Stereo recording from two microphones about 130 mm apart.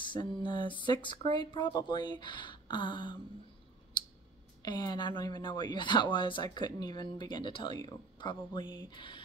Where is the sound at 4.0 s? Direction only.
35° left (ahead or behind).